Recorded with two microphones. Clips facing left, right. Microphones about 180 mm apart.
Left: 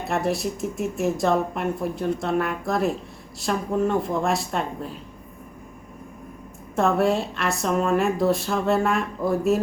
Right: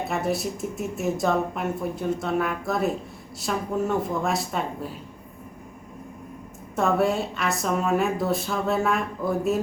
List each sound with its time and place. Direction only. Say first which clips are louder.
0.1 s speech: left 5 dB; centre (ahead or behind)
6.7 s speech: left 2 dB; centre (ahead or behind)